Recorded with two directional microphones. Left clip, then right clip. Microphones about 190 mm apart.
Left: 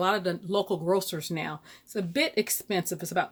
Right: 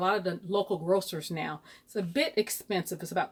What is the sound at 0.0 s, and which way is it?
Speech, 30° left (ahead or behind).